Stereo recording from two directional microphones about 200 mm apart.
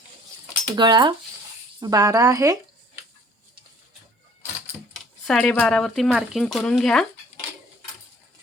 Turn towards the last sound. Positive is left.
turn(degrees=0)  # may be behind; listen again after turning